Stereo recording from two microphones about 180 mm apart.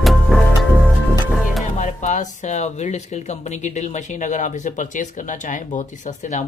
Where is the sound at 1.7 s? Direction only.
40° left (ahead or behind).